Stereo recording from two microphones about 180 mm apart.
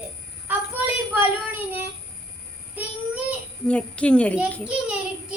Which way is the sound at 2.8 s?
10° right (ahead or behind).